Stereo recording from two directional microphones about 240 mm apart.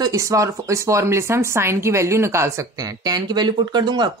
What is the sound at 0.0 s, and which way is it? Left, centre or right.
Speech, centre.